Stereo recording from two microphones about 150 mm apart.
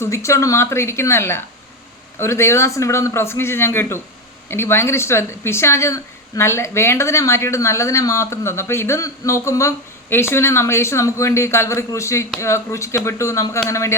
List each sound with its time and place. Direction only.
0.0 s a man's voice: 20° left (ahead or behind)